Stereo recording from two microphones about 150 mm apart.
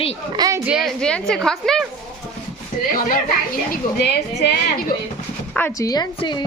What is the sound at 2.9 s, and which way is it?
Speech, 65° left (ahead or behind).